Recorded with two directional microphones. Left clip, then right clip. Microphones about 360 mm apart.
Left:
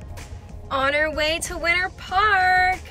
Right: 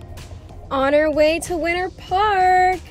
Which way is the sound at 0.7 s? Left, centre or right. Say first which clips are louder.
Right 3 dB; centre.